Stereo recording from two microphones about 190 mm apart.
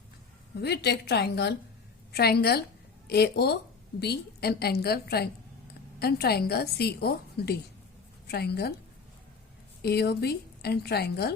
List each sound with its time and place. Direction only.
0.6 s a woman's voice: 60° left (ahead or behind)
9.8 s a woman's voice: 60° left (ahead or behind)